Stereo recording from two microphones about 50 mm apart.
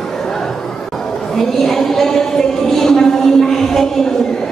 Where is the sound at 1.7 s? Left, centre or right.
Centre.